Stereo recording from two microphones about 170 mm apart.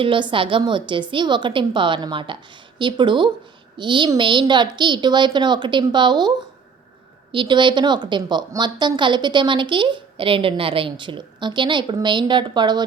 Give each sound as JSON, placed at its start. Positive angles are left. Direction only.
{"t": 0.0, "sound": "a woman's voice", "side_deg": -30}
{"t": 7.3, "sound": "a woman's voice", "side_deg": -25}